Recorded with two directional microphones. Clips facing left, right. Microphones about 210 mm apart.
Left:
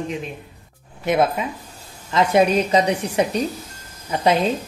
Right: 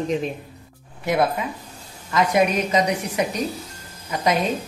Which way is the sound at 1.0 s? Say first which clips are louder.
Left 2 dB; 20° left (ahead or behind).